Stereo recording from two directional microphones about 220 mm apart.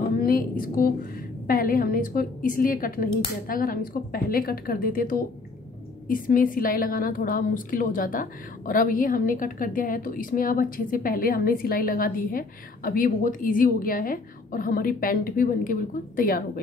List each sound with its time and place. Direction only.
0.2 s a woman's voice: 40° left (ahead or behind)